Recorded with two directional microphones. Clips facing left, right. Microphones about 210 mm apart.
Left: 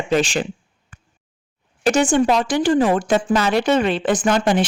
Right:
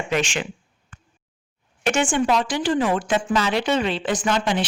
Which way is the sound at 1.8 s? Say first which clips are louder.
Left 5 dB; 35° left (ahead or behind).